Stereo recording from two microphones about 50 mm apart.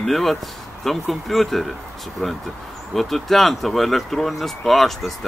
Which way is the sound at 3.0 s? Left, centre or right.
Centre.